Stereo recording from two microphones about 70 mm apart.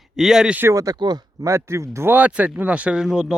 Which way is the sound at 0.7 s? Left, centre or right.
Right.